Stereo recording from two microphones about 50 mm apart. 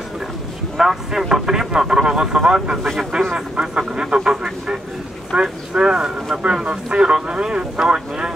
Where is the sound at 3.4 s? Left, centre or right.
Right.